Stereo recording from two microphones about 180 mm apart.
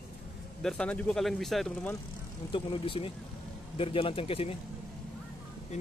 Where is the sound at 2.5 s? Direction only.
30° left (ahead or behind).